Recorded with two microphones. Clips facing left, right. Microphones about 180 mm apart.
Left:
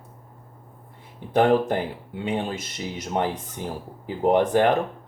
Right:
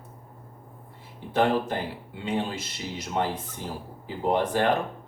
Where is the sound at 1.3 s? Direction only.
50° left (ahead or behind).